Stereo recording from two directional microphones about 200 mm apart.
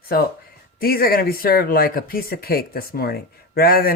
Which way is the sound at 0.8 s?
50° left (ahead or behind).